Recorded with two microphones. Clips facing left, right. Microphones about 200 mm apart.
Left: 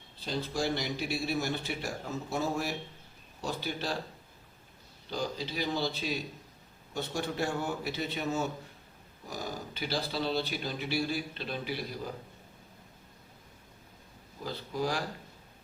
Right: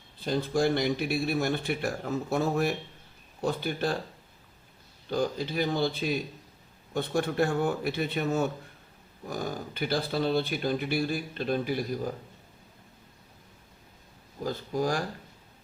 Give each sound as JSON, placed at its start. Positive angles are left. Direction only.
{"t": 0.2, "sound": "a man's voice", "side_deg": -50}
{"t": 5.1, "sound": "a man's voice", "side_deg": -50}
{"t": 14.4, "sound": "speech", "side_deg": -45}